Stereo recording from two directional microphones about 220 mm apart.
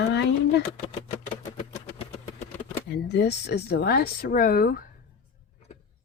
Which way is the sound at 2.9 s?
50° left (ahead or behind).